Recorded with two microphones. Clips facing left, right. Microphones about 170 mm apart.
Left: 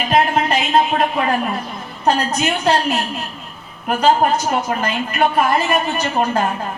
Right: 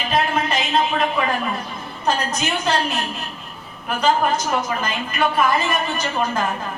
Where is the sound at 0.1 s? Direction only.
60° left (ahead or behind).